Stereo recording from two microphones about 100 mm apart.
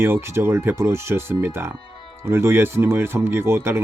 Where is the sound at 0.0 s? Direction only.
25° right (ahead or behind).